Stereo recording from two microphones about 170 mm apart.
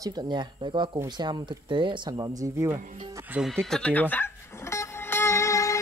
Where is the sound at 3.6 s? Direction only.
5° left (ahead or behind).